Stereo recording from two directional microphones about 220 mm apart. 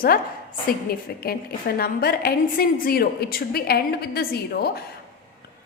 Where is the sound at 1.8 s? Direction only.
45° left (ahead or behind).